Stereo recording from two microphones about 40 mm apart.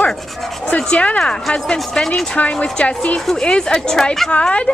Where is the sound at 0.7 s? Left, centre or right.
Left.